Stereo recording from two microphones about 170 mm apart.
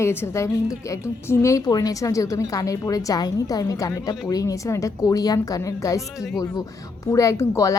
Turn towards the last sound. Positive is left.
turn(degrees=20)  # may be behind; listen again after turning